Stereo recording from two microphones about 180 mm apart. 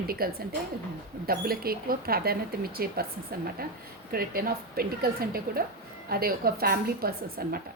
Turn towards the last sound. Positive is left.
turn(degrees=-55)  # may be behind; listen again after turning